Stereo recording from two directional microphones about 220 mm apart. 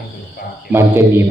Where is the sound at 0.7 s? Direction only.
10° right (ahead or behind).